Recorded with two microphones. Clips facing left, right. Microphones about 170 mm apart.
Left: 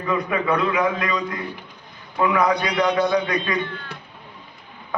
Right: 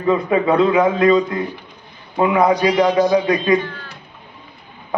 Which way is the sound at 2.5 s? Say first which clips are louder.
Right 6 dB; 35° right (ahead or behind).